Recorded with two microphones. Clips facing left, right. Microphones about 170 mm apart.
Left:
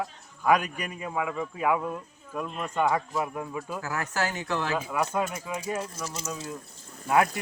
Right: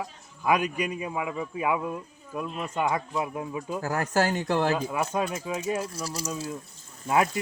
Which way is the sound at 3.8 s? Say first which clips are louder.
Right 6 dB; 35° right (ahead or behind).